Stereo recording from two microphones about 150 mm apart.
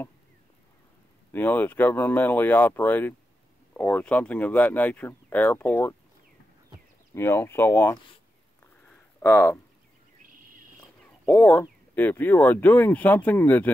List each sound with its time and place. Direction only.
1.3 s speech: 10° left (ahead or behind)
7.2 s speech: 15° left (ahead or behind)
9.2 s speech: 20° left (ahead or behind)
11.2 s speech: 10° left (ahead or behind)